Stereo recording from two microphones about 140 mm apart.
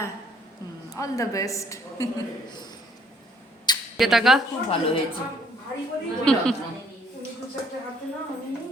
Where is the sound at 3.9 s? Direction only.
Centre (ahead or behind).